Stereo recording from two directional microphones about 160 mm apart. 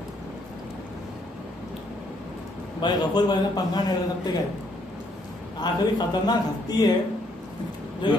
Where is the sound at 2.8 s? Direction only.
25° left (ahead or behind).